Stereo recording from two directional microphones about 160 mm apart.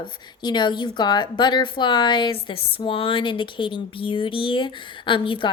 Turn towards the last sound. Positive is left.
turn(degrees=30)  # may be behind; listen again after turning